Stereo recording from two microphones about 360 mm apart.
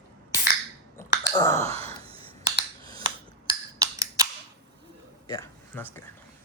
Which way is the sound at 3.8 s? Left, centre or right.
Centre.